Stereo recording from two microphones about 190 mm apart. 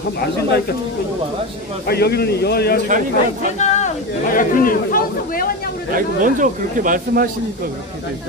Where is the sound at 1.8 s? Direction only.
55° left (ahead or behind).